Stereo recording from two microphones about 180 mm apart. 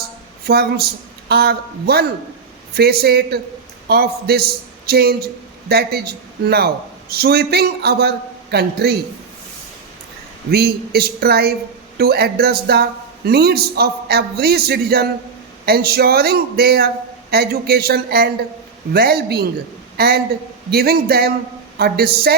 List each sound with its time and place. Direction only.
0.4 s a man's voice: 60° right (ahead or behind)
10.5 s speech: 60° right (ahead or behind)